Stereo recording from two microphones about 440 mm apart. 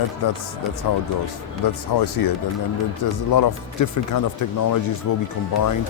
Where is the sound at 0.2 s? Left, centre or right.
Left.